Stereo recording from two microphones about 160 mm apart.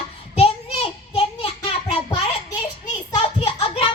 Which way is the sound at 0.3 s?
35° left (ahead or behind).